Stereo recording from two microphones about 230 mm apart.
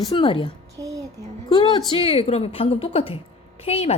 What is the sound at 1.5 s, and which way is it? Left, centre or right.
A woman's voice, centre.